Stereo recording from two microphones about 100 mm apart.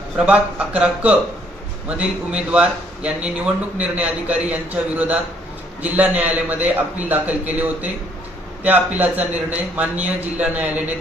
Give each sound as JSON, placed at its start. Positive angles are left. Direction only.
{"t": 0.3, "sound": "a man's voice", "side_deg": -15}